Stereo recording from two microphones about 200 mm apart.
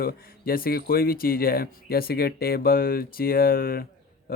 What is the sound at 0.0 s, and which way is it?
Speech, 45° left (ahead or behind).